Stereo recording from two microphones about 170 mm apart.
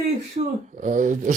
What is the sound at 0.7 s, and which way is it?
Speech, 45° right (ahead or behind).